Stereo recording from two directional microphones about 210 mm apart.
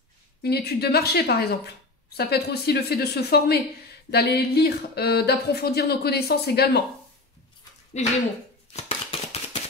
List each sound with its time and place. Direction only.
0.4 s a woman's voice: 50° left (ahead or behind)
8.0 s speech: 30° left (ahead or behind)
8.7 s a sound: 30° left (ahead or behind)